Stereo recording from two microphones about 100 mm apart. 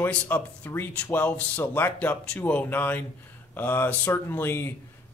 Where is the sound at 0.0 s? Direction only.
20° left (ahead or behind).